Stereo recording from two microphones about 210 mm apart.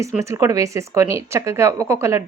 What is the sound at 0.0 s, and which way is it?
Speech, 15° right (ahead or behind).